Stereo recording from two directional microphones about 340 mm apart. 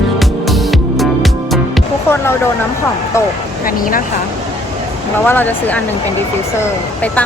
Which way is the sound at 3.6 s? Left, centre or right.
Left.